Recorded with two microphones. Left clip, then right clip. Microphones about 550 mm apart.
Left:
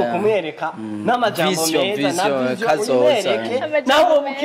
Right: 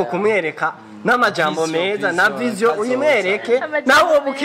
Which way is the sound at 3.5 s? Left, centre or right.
Right.